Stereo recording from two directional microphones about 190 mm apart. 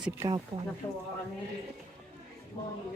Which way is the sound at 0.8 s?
15° left (ahead or behind).